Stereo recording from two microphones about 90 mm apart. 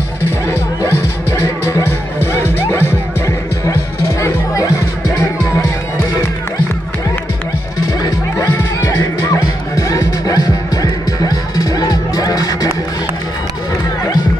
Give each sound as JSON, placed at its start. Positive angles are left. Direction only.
{"t": 0.5, "sound": "music", "side_deg": 30}
{"t": 8.9, "sound": "music", "side_deg": 35}